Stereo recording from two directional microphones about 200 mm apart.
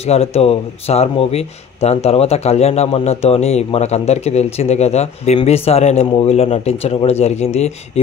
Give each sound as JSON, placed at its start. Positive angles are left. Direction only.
{"t": 0.0, "sound": "speech", "side_deg": 30}